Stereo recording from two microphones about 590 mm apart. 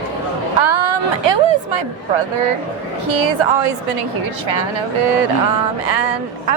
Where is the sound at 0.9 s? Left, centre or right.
Right.